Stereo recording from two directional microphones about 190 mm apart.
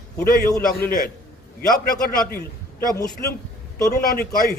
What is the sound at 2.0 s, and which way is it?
Speech, 50° left (ahead or behind).